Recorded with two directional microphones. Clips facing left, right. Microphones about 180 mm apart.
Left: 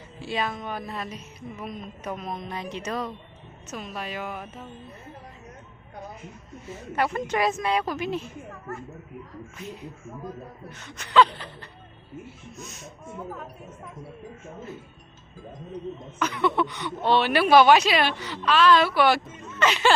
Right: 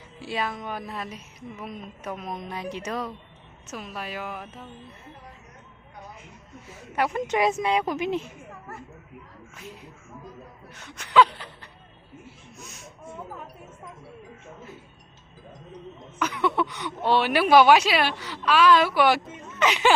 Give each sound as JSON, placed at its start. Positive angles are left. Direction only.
{"t": 0.2, "sound": "speech", "side_deg": -5}
{"t": 6.9, "sound": "speech", "side_deg": -10}
{"t": 7.3, "sound": "speech", "side_deg": -20}
{"t": 10.8, "sound": "speech", "side_deg": -10}
{"t": 16.1, "sound": "speech", "side_deg": -10}